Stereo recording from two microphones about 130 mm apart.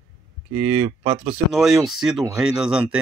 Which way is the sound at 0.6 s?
15° right (ahead or behind).